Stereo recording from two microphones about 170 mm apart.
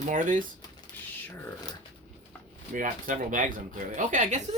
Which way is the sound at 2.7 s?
50° right (ahead or behind).